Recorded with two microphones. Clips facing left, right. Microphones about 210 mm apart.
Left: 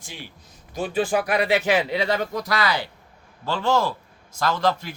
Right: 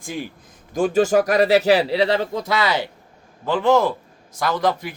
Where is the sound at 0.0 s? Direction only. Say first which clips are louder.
Right 11 dB; 50° right (ahead or behind).